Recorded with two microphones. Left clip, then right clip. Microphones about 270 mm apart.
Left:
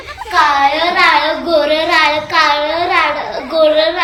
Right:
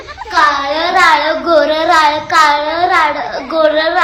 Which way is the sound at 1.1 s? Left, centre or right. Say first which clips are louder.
Right 2 dB; centre.